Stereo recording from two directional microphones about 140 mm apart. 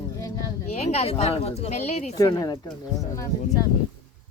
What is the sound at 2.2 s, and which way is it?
Speech, 30° left (ahead or behind).